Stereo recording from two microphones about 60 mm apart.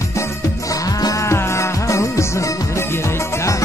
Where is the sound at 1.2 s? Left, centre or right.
Left.